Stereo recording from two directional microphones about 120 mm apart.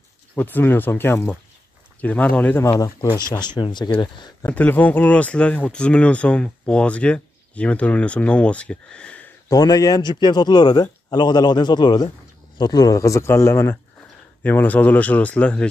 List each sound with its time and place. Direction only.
0.4 s speech: 15° left (ahead or behind)
3.2 s a man's voice: 35° left (ahead or behind)
4.5 s speech: 15° left (ahead or behind)
9.5 s a man's voice: 30° left (ahead or behind); by 15.7 s 10° left (ahead or behind)